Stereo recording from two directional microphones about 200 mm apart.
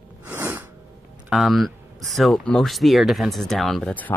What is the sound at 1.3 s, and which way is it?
Speech, centre (ahead or behind).